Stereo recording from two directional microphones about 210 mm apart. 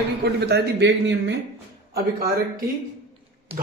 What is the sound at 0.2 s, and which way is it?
Speech, 50° right (ahead or behind).